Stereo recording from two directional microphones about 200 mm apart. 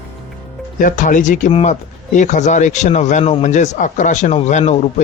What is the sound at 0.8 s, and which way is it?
A man's voice, 40° left (ahead or behind).